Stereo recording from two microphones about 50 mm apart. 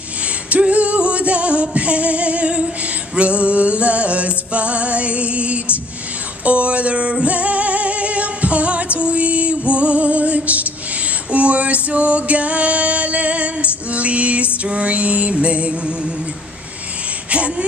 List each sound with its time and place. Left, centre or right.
0.5 s female singing: right
3.2 s music: right
6.4 s female singing: right
11.3 s music: right
17.3 s a sound: right